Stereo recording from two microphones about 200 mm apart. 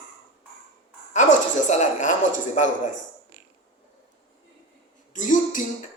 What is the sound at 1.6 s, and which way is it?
A man's voice, 35° left (ahead or behind).